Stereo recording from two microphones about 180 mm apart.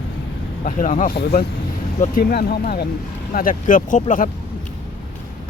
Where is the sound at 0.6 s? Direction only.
45° left (ahead or behind).